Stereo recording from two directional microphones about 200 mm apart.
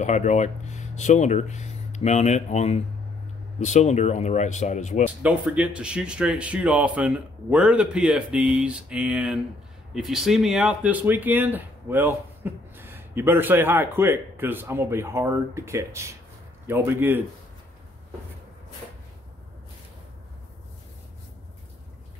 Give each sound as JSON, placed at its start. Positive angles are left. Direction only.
{"t": 0.0, "sound": "speech", "side_deg": 35}
{"t": 5.2, "sound": "speech", "side_deg": -5}